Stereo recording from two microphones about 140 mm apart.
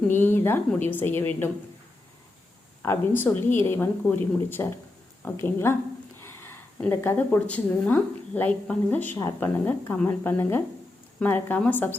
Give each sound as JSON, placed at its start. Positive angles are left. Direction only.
{"t": 0.1, "sound": "a woman's voice", "side_deg": 15}
{"t": 2.8, "sound": "a woman's voice", "side_deg": 15}
{"t": 6.2, "sound": "a sound", "side_deg": 15}
{"t": 7.3, "sound": "a woman's voice", "side_deg": 10}